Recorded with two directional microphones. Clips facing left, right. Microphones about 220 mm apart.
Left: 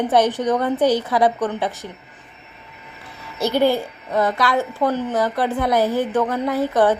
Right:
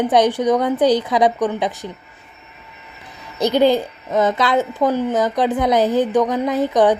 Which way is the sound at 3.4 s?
15° right (ahead or behind).